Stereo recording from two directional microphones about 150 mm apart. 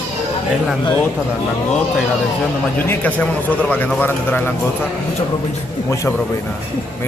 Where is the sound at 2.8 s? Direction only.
10° left (ahead or behind).